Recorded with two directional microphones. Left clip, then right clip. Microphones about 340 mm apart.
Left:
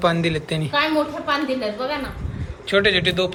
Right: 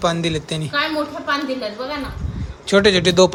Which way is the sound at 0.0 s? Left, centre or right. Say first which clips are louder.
Even; centre.